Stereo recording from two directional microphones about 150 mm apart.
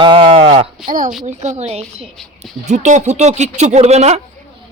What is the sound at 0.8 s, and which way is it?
Speech, 60° right (ahead or behind).